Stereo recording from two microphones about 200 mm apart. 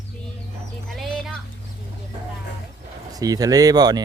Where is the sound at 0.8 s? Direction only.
Centre (ahead or behind).